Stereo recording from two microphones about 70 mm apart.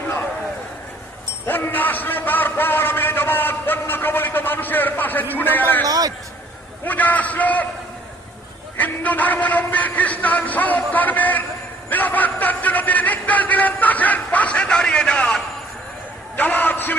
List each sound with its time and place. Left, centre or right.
1.5 s a sound: left
5.8 s a man's voice: right
6.8 s a man's voice: left
8.8 s a man's voice: left
16.4 s a man's voice: left